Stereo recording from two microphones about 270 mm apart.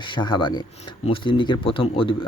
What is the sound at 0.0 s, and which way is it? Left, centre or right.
Speech, centre.